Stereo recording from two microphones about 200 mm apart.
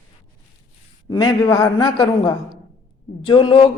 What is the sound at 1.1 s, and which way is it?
A woman's voice, 25° left (ahead or behind).